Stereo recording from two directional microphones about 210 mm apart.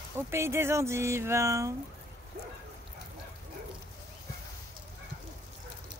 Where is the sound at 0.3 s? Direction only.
10° right (ahead or behind).